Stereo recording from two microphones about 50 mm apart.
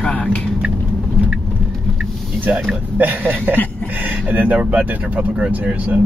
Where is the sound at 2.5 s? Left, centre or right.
Right.